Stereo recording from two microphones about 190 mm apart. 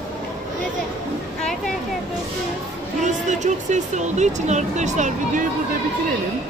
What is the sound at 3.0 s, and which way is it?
Speech, 40° right (ahead or behind).